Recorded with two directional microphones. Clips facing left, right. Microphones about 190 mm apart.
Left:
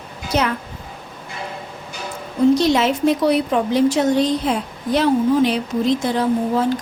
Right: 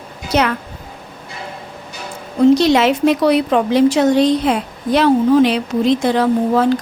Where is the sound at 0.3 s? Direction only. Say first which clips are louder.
Right 4 dB; 75° right (ahead or behind).